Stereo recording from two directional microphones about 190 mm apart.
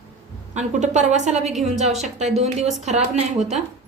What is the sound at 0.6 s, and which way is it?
Speech, 40° right (ahead or behind).